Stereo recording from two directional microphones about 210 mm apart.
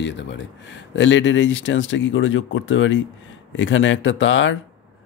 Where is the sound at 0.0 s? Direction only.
55° left (ahead or behind).